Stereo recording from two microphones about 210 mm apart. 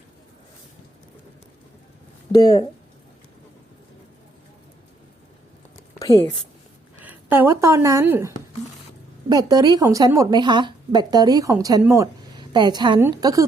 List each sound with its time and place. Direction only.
2.4 s speech: 20° left (ahead or behind)
6.0 s a sound: 15° left (ahead or behind)
7.0 s speech: 10° right (ahead or behind)
9.3 s a woman's voice: 20° right (ahead or behind)